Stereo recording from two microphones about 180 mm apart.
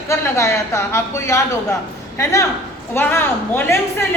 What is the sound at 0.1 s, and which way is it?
A woman's voice, 15° left (ahead or behind).